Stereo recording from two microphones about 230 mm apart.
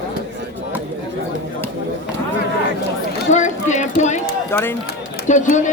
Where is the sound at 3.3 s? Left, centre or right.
Left.